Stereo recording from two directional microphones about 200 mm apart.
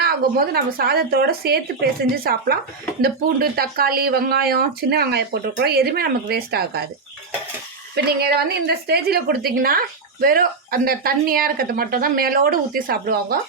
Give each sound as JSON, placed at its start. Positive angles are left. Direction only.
{"t": 0.0, "sound": "a woman's voice", "side_deg": -50}
{"t": 7.9, "sound": "a woman's voice", "side_deg": -55}